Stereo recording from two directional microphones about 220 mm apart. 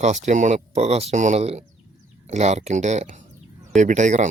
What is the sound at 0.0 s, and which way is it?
Speech, 30° right (ahead or behind).